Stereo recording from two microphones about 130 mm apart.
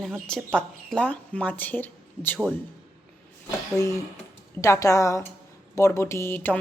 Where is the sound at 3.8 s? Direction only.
25° left (ahead or behind).